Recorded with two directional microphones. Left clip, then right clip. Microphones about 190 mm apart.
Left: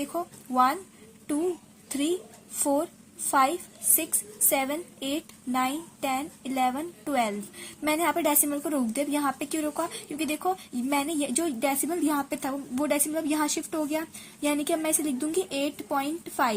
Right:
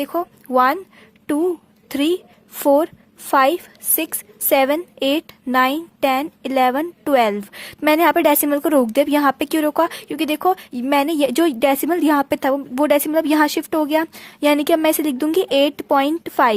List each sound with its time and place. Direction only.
0.0 s a woman's voice: 45° right (ahead or behind)
1.9 s a woman's voice: 45° right (ahead or behind)